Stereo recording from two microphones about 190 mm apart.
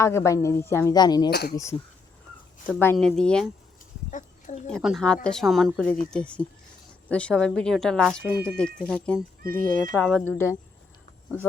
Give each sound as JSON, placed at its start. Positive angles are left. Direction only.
{"t": 0.0, "sound": "speech", "side_deg": 15}
{"t": 1.3, "sound": "speech", "side_deg": 55}
{"t": 2.6, "sound": "speech", "side_deg": 10}
{"t": 4.1, "sound": "speech", "side_deg": 40}
{"t": 4.7, "sound": "speech", "side_deg": 0}